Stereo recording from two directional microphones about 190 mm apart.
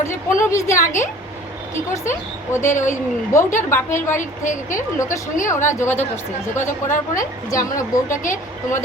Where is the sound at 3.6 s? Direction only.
15° left (ahead or behind).